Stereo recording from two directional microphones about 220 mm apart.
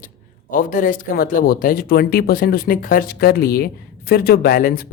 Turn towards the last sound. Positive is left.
turn(degrees=40)  # may be behind; listen again after turning